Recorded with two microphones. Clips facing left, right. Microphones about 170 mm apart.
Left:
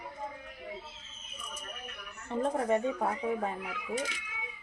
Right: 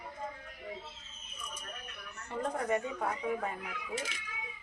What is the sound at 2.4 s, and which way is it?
Speech, 20° left (ahead or behind).